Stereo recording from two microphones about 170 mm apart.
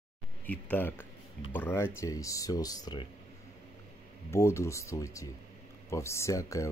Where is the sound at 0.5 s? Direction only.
10° left (ahead or behind).